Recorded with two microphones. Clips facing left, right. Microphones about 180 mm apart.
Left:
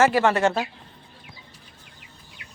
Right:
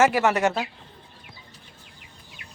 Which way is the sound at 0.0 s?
15° right (ahead or behind).